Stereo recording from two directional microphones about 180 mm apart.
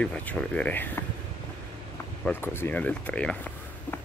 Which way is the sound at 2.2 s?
10° left (ahead or behind).